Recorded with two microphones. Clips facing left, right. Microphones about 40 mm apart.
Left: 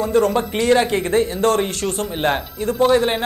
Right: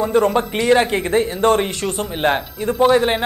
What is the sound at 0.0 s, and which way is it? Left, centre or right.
Speech, centre.